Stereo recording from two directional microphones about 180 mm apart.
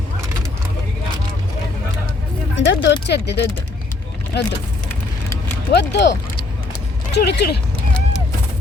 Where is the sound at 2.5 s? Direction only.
80° left.